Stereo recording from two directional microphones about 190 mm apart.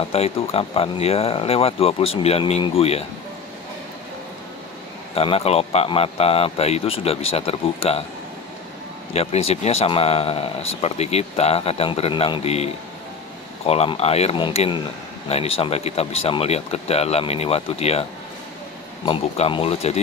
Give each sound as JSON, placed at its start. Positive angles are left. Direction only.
{"t": 0.1, "sound": "speech", "side_deg": 30}
{"t": 5.1, "sound": "speech", "side_deg": 30}
{"t": 9.1, "sound": "speech", "side_deg": 35}
{"t": 19.0, "sound": "speech", "side_deg": 30}